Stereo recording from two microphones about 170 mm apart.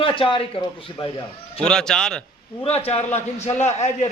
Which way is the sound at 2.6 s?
35° left (ahead or behind).